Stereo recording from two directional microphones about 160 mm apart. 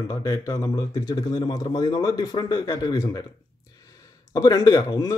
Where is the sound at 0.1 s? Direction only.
20° left (ahead or behind).